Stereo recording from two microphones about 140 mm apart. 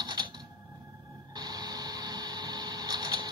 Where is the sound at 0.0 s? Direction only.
30° right (ahead or behind).